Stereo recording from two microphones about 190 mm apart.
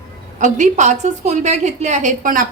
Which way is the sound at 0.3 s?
40° right (ahead or behind).